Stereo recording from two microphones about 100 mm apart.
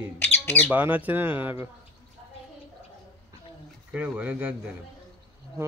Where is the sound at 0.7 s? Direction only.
15° right (ahead or behind).